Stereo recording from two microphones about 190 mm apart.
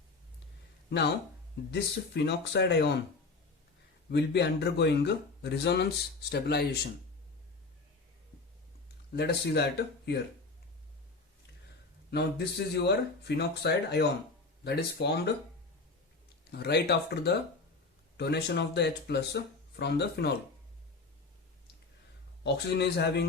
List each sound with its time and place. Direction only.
1.7 s speech: 60° left (ahead or behind)
4.1 s speech: 60° left (ahead or behind)
9.1 s speech: 60° left (ahead or behind)
12.1 s speech: 60° left (ahead or behind)
16.4 s speech: 55° left (ahead or behind)
22.4 s speech: 60° left (ahead or behind)